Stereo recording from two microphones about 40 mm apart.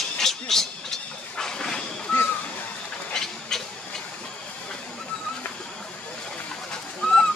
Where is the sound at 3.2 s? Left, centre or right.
Centre.